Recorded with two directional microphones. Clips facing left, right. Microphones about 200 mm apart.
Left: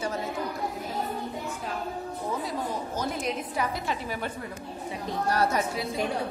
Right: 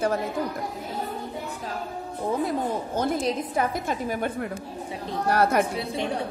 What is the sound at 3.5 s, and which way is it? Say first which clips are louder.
Speech: right 4 dB; 50° right (ahead or behind).